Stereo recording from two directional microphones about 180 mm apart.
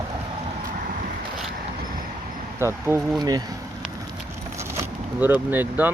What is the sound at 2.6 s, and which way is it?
Speech, 15° right (ahead or behind).